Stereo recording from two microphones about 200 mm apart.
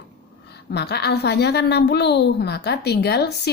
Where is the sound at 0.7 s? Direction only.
55° left (ahead or behind).